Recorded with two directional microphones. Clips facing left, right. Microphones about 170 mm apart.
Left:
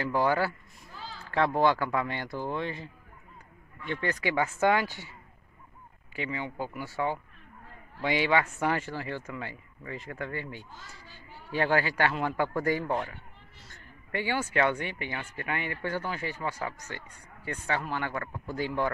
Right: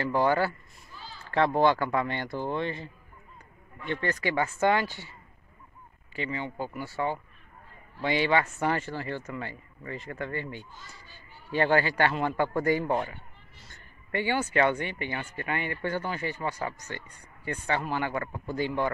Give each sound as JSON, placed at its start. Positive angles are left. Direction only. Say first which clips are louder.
{"t": 0.0, "sound": "speech", "louder": "right 2 dB", "side_deg": 5}
{"t": 1.0, "sound": "a sound", "louder": "left 4 dB", "side_deg": 90}
{"t": 1.3, "sound": "speech", "louder": "right 2 dB", "side_deg": 5}
{"t": 6.1, "sound": "speech", "louder": "right 1 dB", "side_deg": 10}
{"t": 13.7, "sound": "a sound", "louder": "right 2 dB", "side_deg": 5}
{"t": 14.4, "sound": "speech", "louder": "right 1 dB", "side_deg": 0}